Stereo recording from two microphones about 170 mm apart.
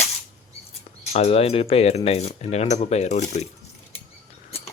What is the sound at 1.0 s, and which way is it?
Speech, 40° left (ahead or behind).